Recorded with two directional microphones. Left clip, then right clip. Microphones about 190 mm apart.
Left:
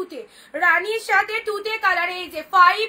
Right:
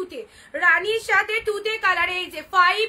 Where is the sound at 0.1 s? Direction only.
20° right (ahead or behind).